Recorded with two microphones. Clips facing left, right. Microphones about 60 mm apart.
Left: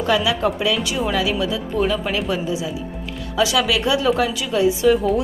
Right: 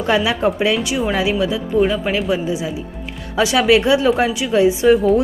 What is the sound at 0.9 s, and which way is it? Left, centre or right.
Speech, centre.